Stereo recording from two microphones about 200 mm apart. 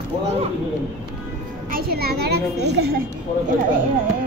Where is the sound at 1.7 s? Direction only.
50° right (ahead or behind).